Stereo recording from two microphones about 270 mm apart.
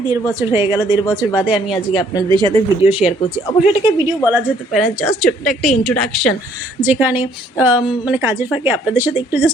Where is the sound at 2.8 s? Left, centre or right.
Centre.